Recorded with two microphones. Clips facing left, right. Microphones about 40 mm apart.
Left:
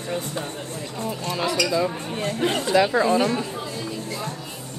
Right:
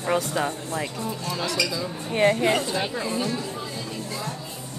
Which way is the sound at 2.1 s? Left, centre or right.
Right.